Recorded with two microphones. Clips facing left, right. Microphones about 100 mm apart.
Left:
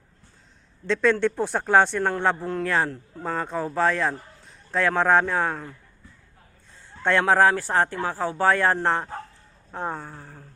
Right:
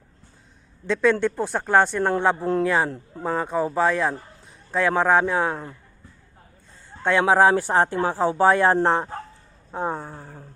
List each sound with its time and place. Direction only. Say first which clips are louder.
1.2 s a man's voice: even; centre (ahead or behind)
7.0 s a man's voice: right 2 dB; 5° right (ahead or behind)